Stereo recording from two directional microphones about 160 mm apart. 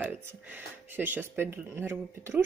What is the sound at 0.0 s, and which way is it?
Speech, 10° right (ahead or behind).